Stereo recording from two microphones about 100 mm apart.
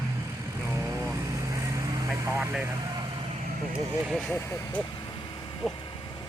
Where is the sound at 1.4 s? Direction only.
30° right (ahead or behind).